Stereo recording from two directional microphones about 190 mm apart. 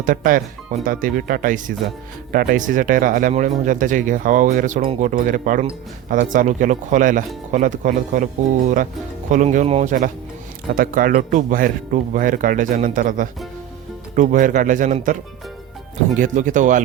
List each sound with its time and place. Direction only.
0.0 s speech: 45° right (ahead or behind)
9.3 s speech: 40° right (ahead or behind)